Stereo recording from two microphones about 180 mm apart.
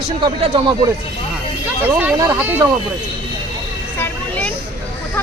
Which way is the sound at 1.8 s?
10° right (ahead or behind).